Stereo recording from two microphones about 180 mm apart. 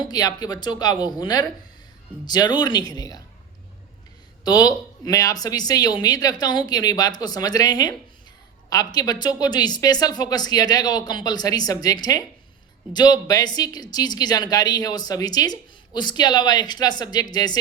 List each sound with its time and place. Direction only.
0.0 s speech: 20° left (ahead or behind)
4.4 s speech: 20° left (ahead or behind)